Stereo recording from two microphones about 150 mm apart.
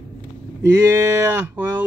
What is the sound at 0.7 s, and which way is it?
Speech, 15° right (ahead or behind).